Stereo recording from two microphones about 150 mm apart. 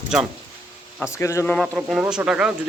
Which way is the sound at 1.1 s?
15° left (ahead or behind).